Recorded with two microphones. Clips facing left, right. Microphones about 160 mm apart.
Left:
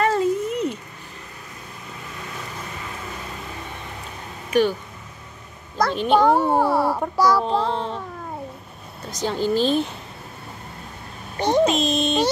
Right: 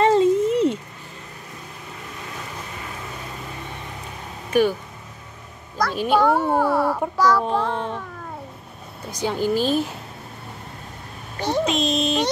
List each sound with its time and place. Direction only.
0.0 s a sound: 25° right (ahead or behind)
5.9 s a woman's voice: 10° right (ahead or behind)
6.2 s speech: 15° left (ahead or behind)
7.5 s child singing: 15° left (ahead or behind)
9.1 s a woman's voice: 10° right (ahead or behind)
11.3 s a child's voice: 20° left (ahead or behind)
11.6 s a sound: centre (ahead or behind)